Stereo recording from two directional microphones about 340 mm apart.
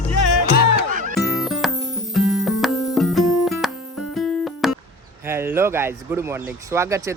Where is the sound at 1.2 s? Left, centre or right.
Centre.